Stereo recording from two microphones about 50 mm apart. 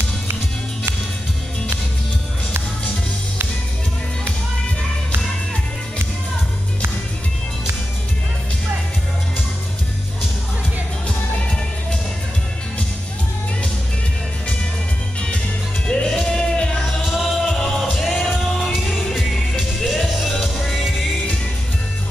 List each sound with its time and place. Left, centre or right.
15.9 s music: centre
17.0 s music: centre
17.4 s music: centre